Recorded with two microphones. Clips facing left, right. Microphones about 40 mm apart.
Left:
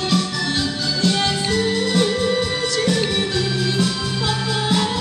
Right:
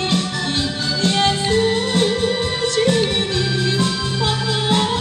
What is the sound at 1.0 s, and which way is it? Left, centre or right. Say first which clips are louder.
Music: right 3 dB; right.